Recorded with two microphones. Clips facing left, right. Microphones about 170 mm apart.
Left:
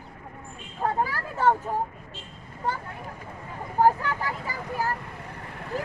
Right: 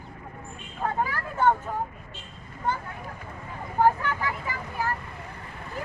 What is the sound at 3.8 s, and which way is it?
Vehicle, 40° left (ahead or behind).